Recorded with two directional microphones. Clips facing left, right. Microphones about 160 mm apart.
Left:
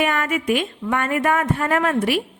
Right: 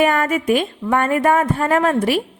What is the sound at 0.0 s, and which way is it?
A woman's voice, 40° right (ahead or behind).